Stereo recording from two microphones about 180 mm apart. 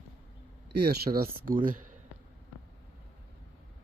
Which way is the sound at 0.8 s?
60° right (ahead or behind).